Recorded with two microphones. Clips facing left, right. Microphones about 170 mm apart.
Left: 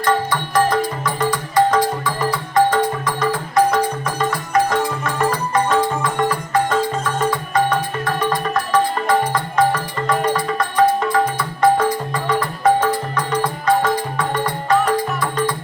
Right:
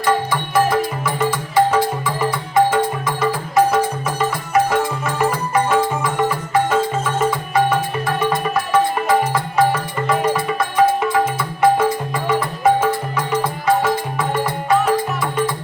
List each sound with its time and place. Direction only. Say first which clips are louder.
0.0 s music: even; 5° right (ahead or behind)